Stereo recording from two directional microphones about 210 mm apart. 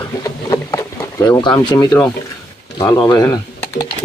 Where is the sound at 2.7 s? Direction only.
15° left (ahead or behind).